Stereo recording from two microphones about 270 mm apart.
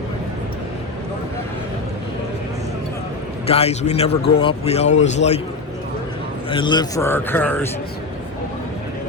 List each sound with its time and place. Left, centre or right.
3.4 s a man's voice: left
6.5 s a man's voice: centre